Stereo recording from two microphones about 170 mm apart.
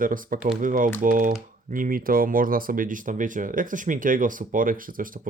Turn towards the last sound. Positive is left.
turn(degrees=-55)  # may be behind; listen again after turning